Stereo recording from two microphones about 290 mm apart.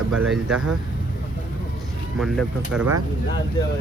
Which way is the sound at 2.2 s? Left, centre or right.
Centre.